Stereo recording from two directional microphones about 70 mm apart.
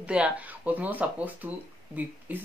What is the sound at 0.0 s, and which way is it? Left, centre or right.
Speech, centre.